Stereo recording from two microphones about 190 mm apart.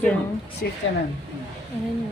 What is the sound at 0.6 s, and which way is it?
Speech, 55° left (ahead or behind).